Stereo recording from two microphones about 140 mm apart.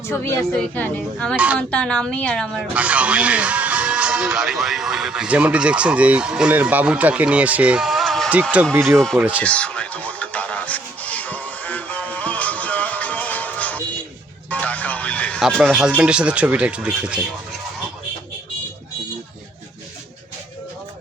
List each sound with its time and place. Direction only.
0.1 s a woman's voice: 15° left (ahead or behind)
2.7 s speech: 10° right (ahead or behind)
8.3 s speech: 10° right (ahead or behind)
8.9 s speech: centre (ahead or behind)
9.4 s music: 10° left (ahead or behind)
15.4 s speech: centre (ahead or behind)